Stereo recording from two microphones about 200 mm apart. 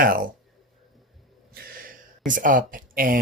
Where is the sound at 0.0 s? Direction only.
45° right (ahead or behind).